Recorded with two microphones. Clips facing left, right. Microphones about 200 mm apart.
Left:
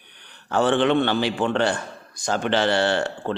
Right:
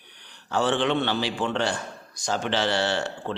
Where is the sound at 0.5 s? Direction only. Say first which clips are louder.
Left 4 dB; 55° left (ahead or behind).